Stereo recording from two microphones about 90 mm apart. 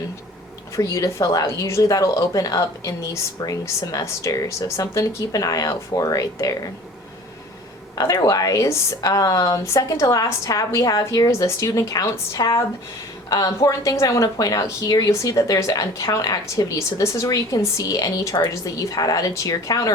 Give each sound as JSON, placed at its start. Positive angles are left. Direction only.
{"t": 0.8, "sound": "speech", "side_deg": 35}
{"t": 7.9, "sound": "speech", "side_deg": 45}